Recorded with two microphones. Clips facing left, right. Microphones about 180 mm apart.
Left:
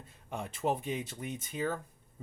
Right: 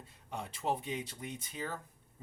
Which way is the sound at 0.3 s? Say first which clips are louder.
Left 3 dB; 50° left (ahead or behind).